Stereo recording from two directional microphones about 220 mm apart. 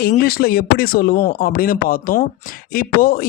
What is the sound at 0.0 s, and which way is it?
Speech, 45° left (ahead or behind).